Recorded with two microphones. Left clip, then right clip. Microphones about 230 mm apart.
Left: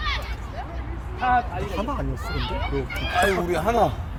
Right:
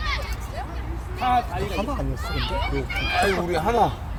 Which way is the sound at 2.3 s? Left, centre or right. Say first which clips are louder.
Right 3 dB; right.